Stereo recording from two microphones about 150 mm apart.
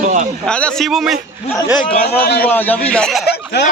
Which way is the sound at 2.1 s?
90° left.